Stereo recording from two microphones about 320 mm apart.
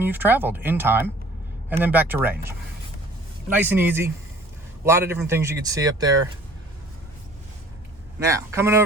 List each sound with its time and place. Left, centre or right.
0.0 s speech: centre
3.5 s speech: centre
8.2 s speech: centre